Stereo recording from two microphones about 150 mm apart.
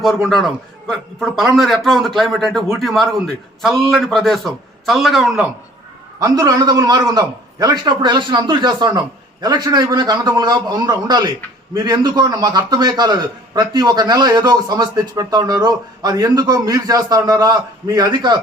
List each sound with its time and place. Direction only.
0.0 s a man's voice: centre (ahead or behind)
6.1 s a man's voice: 25° right (ahead or behind)